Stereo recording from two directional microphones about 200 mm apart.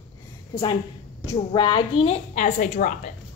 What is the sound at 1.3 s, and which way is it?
A woman's voice, 20° left (ahead or behind).